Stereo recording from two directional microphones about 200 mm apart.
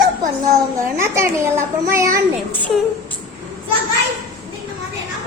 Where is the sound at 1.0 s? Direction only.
15° right (ahead or behind).